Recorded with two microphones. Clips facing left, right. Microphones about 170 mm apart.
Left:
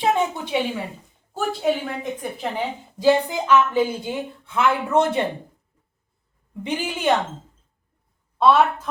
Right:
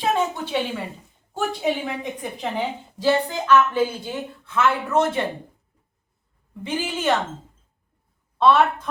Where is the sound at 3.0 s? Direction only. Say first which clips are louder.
Left 3 dB; 15° left (ahead or behind).